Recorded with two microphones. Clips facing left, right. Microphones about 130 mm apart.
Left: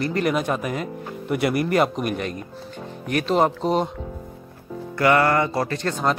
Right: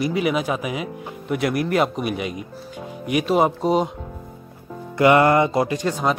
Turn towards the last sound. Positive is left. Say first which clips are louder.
# right 2 dB
turn(degrees=-10)  # may be behind; listen again after turning